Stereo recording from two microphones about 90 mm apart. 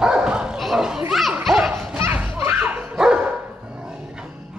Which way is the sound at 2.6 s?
15° right (ahead or behind).